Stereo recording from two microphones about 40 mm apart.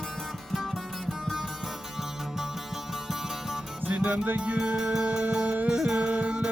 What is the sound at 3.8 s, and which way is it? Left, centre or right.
Music, right.